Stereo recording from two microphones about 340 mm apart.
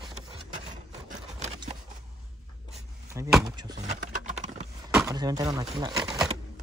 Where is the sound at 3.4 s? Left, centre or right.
Centre.